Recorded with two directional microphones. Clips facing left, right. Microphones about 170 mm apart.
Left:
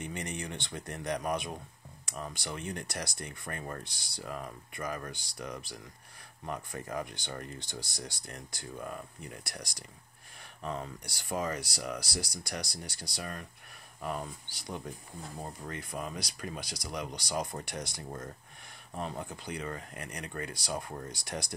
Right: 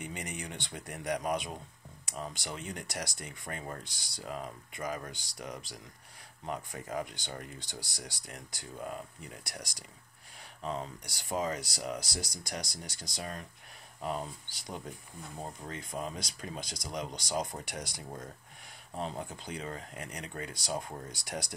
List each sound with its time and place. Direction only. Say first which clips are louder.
0.0 s speech: left 2 dB; 15° right (ahead or behind)